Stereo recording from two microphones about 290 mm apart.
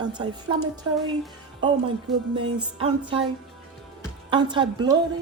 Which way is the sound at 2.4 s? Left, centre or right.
Centre.